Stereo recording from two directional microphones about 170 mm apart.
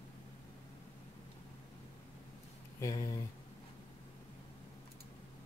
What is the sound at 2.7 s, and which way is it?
Speech, 20° left (ahead or behind).